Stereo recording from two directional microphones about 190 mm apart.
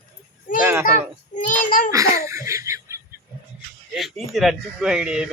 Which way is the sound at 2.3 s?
15° right (ahead or behind).